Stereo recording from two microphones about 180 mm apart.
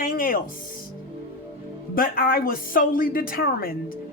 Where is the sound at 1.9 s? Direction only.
50° left (ahead or behind).